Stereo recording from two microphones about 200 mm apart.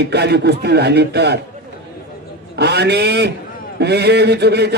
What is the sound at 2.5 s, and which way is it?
A man's voice, 55° right (ahead or behind).